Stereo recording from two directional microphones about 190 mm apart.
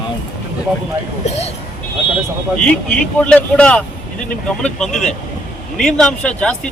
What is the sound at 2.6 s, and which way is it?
Speech, 5° left (ahead or behind).